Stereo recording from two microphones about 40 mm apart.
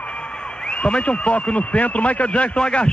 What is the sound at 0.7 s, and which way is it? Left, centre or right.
A man's voice, left.